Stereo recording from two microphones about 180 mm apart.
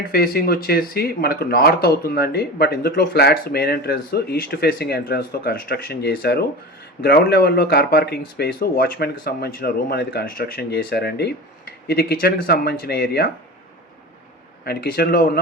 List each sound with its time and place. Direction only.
0.0 s speech: 55° left (ahead or behind)
14.6 s speech: 60° left (ahead or behind)